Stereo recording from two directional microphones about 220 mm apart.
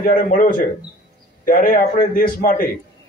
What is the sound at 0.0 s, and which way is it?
A man's voice, 40° left (ahead or behind).